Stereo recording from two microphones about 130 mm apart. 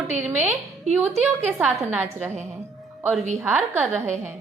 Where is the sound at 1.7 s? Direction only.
15° right (ahead or behind).